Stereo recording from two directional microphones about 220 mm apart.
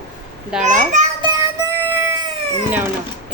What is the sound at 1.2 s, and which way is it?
Music, 15° right (ahead or behind).